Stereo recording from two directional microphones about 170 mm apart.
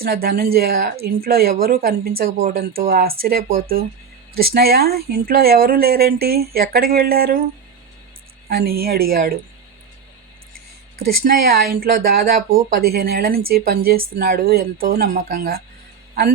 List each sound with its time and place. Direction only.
0.0 s speech: 65° right (ahead or behind)
8.4 s speech: 65° right (ahead or behind)
11.0 s speech: 60° right (ahead or behind)